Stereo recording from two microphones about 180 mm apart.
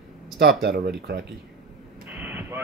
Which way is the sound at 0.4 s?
65° right (ahead or behind).